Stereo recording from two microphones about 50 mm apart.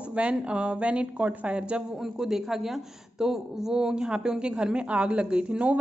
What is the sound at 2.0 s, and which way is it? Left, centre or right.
A woman's voice, centre.